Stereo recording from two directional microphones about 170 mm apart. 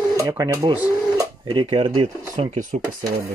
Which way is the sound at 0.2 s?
20° right (ahead or behind).